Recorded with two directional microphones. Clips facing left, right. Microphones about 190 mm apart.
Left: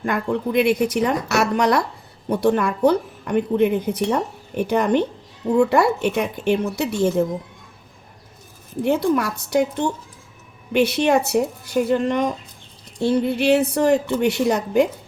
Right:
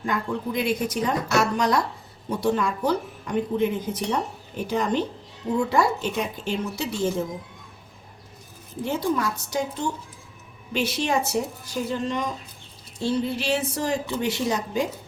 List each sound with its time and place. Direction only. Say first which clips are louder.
0.0 s speech: left 5 dB; 65° left (ahead or behind)
8.8 s speech: left 6 dB; 65° left (ahead or behind)